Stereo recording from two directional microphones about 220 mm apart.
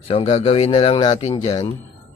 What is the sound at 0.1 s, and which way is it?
Speech, 25° left (ahead or behind).